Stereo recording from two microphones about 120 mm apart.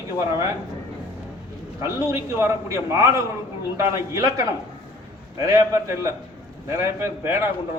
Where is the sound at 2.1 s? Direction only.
25° right (ahead or behind).